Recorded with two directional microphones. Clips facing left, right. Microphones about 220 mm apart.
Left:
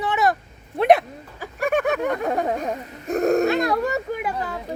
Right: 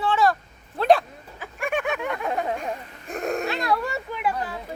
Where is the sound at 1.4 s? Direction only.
40° left (ahead or behind).